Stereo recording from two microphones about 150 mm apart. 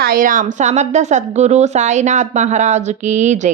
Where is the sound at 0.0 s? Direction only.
70° right (ahead or behind).